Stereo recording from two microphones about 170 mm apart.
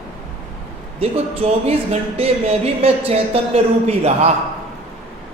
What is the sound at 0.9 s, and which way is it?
A woman's voice, 35° right (ahead or behind).